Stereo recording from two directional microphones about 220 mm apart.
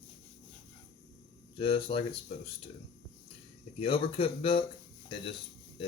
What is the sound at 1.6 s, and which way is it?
Speech, 25° left (ahead or behind).